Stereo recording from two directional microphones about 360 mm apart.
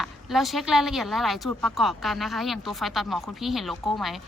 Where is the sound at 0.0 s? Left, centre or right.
Centre.